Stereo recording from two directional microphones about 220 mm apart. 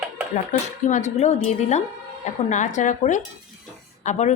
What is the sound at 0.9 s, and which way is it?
A woman's voice, 35° left (ahead or behind).